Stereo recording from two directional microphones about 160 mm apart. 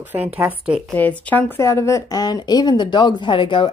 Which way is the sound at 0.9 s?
10° left (ahead or behind).